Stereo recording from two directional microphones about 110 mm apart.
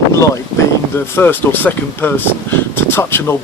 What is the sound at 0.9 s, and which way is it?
Speech, 20° left (ahead or behind).